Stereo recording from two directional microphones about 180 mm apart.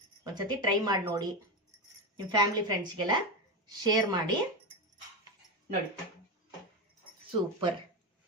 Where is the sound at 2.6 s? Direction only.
25° right (ahead or behind).